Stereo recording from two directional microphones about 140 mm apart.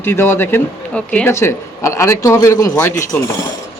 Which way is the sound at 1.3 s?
20° left (ahead or behind).